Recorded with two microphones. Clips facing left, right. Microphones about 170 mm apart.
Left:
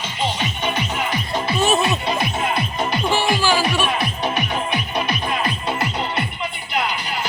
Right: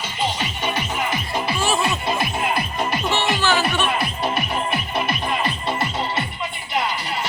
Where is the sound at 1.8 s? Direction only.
Centre (ahead or behind).